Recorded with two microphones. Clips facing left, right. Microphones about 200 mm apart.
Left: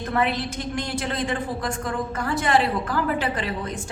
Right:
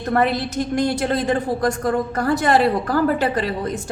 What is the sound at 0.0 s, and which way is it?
A woman's voice, 40° right (ahead or behind).